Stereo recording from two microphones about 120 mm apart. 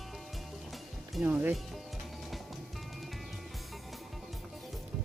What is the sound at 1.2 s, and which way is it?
Speech, 15° right (ahead or behind).